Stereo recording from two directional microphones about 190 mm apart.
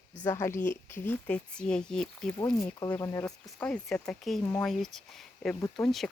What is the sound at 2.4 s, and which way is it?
A woman's voice, 20° left (ahead or behind).